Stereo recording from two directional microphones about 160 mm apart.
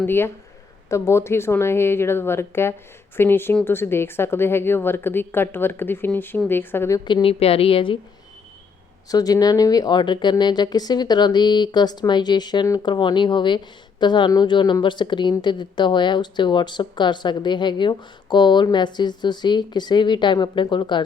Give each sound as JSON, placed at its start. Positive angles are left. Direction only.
{"t": 0.0, "sound": "speech", "side_deg": 15}
{"t": 7.0, "sound": "a woman's voice", "side_deg": 30}
{"t": 9.0, "sound": "a woman's voice", "side_deg": 25}